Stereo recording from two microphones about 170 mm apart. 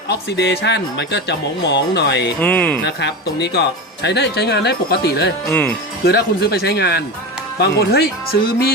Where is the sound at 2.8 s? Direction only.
80° left.